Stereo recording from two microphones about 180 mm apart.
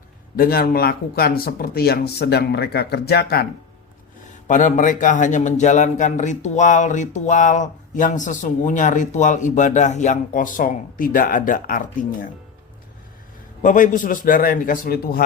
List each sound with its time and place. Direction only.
0.3 s speech: 55° left (ahead or behind)
4.4 s a man's voice: 45° left (ahead or behind)
13.6 s a man's voice: 45° left (ahead or behind)